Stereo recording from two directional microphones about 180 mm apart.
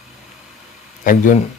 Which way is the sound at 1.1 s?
45° left (ahead or behind).